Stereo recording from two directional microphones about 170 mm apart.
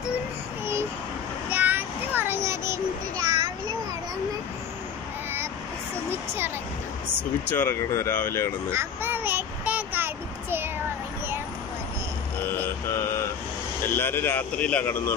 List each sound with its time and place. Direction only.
1.5 s child singing: 10° right (ahead or behind)
6.0 s a sound: 15° right (ahead or behind)
7.4 s speech: 10° left (ahead or behind)
8.7 s child singing: 10° right (ahead or behind)
13.8 s speech: 15° left (ahead or behind)